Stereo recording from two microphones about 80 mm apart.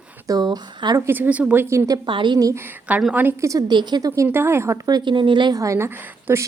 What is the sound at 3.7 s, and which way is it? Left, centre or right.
Speech, right.